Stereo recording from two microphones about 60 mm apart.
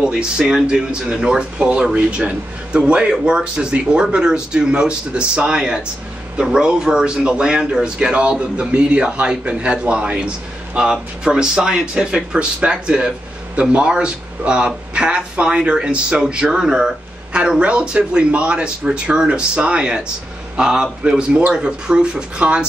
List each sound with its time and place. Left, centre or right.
0.0 s speech: centre